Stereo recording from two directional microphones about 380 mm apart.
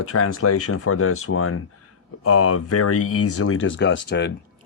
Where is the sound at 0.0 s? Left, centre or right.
Left.